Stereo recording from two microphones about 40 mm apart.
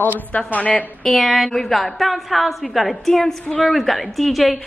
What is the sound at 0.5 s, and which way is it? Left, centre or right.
Speech, left.